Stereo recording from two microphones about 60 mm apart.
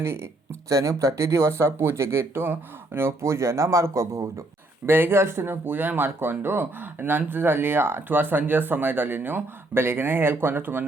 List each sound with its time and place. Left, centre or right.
0.7 s speech: right
4.9 s speech: right